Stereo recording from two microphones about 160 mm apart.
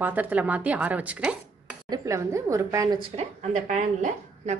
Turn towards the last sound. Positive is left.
turn(degrees=-50)  # may be behind; listen again after turning